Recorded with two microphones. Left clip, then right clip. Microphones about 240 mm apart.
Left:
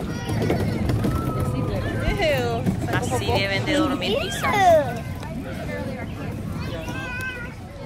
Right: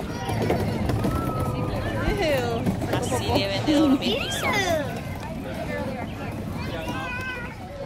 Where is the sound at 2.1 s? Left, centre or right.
Left.